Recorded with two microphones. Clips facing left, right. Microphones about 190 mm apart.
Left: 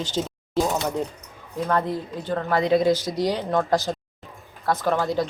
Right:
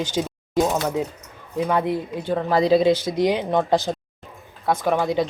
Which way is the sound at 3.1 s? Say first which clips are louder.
Right 3 dB; 20° right (ahead or behind).